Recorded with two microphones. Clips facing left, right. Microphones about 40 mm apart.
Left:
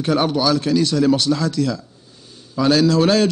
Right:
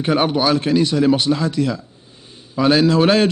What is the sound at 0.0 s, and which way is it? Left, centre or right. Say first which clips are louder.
Speech: right 1 dB; right.